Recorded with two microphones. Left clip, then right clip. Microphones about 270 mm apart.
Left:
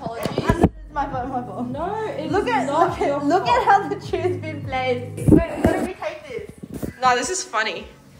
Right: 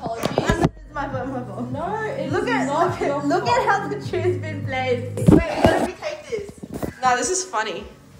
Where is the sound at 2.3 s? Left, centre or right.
Left.